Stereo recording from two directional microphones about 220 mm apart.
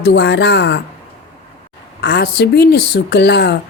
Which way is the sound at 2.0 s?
45° left (ahead or behind).